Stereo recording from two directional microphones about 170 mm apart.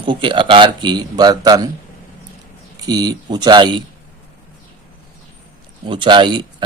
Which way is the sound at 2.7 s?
25° right (ahead or behind).